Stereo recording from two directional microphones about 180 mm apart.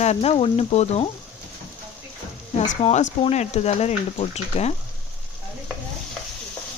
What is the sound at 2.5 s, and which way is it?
Speech, 40° left (ahead or behind).